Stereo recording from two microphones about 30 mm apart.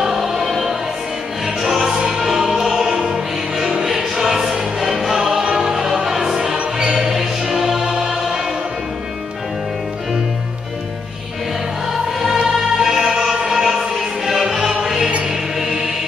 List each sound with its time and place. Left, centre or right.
0.0 s music: centre
3.8 s choir: centre
5.6 s music: centre
6.5 s music: right
12.5 s music: centre